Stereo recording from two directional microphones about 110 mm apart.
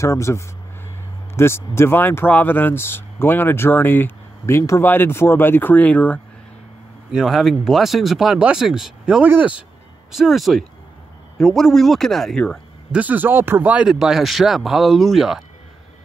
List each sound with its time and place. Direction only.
0.0 s speech: 25° left (ahead or behind)
7.1 s speech: centre (ahead or behind)
9.2 s speech: 15° right (ahead or behind)
10.1 s speech: centre (ahead or behind)
12.9 s speech: 15° right (ahead or behind)